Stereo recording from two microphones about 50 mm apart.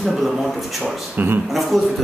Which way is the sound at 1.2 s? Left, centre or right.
Right.